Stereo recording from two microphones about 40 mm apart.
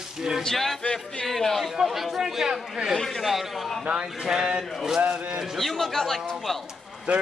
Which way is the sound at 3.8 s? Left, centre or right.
Right.